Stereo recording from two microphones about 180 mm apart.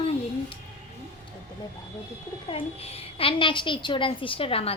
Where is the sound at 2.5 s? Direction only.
35° left (ahead or behind).